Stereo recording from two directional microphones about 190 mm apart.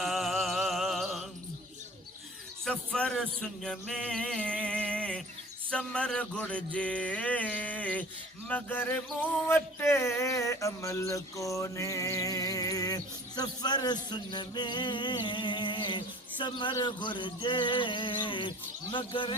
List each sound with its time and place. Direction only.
0.0 s mantra: centre (ahead or behind)
2.6 s speech: 5° left (ahead or behind)
5.7 s a sound: 5° left (ahead or behind); by 19.3 s 25° left (ahead or behind)